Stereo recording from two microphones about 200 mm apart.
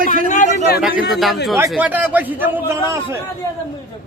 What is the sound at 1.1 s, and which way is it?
Speech, centre (ahead or behind).